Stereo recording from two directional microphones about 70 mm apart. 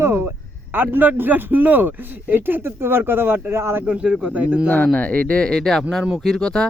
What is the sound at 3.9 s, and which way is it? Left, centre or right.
Speech, centre.